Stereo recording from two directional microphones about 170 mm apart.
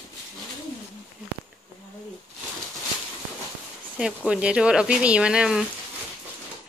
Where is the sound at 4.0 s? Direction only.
5° right (ahead or behind).